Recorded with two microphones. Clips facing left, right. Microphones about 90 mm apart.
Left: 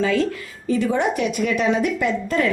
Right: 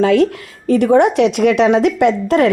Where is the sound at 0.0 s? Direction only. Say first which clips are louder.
Right 8 dB; 70° right (ahead or behind).